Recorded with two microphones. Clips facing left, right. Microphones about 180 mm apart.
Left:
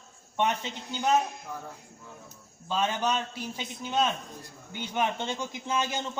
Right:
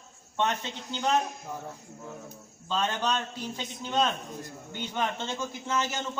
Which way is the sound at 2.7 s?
10° left (ahead or behind).